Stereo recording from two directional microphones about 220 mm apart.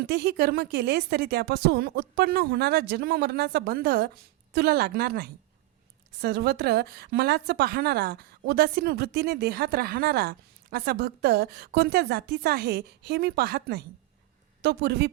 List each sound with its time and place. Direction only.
0.0 s a woman's voice: 45° right (ahead or behind)